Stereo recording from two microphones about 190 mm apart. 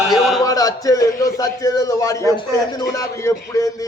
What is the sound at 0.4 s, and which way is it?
A man's voice, 20° left (ahead or behind).